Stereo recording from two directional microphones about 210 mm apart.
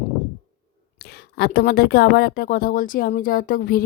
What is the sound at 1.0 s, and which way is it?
A woman's voice, 50° left (ahead or behind).